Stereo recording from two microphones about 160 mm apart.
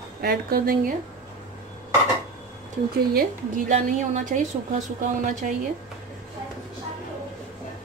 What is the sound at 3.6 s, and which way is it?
A woman's voice, 50° right (ahead or behind).